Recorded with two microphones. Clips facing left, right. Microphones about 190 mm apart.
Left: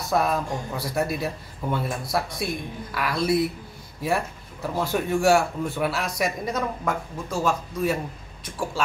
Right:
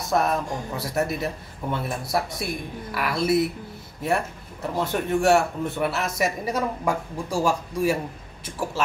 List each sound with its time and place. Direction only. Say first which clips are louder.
0.1 s a man's voice: even; centre (ahead or behind)
4.7 s a man's voice: even; centre (ahead or behind)